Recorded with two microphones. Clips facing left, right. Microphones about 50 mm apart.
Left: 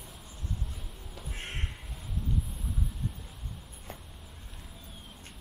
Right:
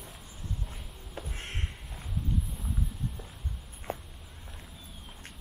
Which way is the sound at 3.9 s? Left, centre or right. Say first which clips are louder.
Right 9 dB; right.